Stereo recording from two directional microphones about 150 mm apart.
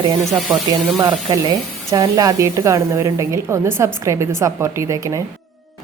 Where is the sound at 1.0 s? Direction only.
25° right (ahead or behind).